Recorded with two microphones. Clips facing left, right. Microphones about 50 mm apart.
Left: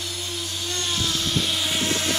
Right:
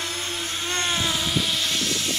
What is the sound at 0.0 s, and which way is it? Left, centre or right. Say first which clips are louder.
Vehicle: right 2 dB; right.